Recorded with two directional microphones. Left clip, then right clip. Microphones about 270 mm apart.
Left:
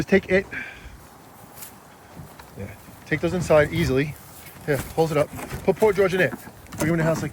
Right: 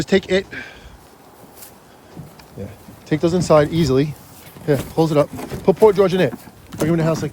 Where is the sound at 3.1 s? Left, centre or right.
Centre.